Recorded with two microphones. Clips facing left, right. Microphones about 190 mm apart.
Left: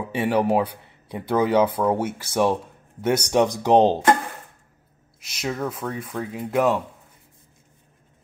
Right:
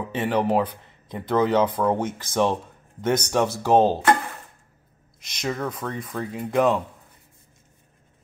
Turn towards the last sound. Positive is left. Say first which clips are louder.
# even
turn(degrees=5)  # may be behind; listen again after turning